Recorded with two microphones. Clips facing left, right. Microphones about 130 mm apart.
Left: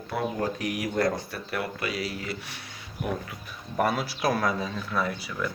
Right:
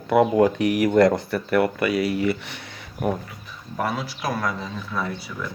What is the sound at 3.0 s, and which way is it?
Speech, 45° right (ahead or behind).